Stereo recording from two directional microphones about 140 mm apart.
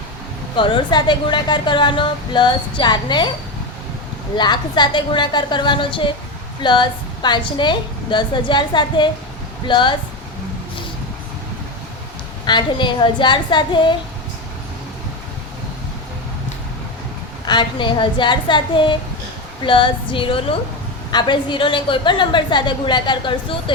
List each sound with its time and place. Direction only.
0.5 s a woman's voice: 35° left (ahead or behind)
4.4 s a woman's voice: 30° left (ahead or behind)
12.5 s a woman's voice: 35° left (ahead or behind)
17.4 s a woman's voice: 35° left (ahead or behind)